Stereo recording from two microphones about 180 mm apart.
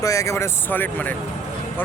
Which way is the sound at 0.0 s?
15° left (ahead or behind).